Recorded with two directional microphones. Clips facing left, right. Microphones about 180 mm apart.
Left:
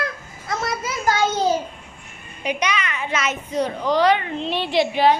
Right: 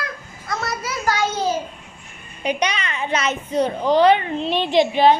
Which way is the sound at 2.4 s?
30° right (ahead or behind).